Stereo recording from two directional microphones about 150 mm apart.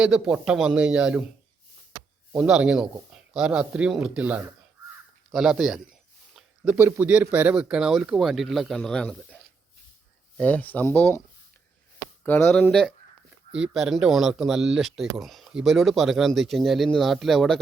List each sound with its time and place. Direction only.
0.0 s speech: 5° right (ahead or behind)
2.3 s speech: 5° right (ahead or behind)
6.3 s a sound: 10° right (ahead or behind)
6.9 s speech: 10° right (ahead or behind); by 11.2 s 15° left (ahead or behind)
12.2 s speech: 10° left (ahead or behind)